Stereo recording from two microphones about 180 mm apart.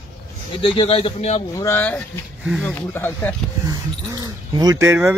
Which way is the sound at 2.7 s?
10° left (ahead or behind).